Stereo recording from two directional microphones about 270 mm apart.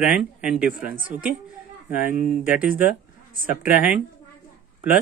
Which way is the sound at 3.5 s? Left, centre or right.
Left.